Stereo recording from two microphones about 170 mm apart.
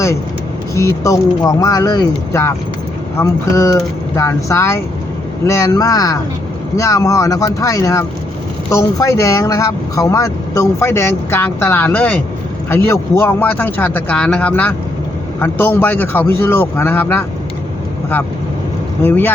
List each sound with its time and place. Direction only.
0.7 s speech: 20° left (ahead or behind)
19.0 s speech: 10° left (ahead or behind)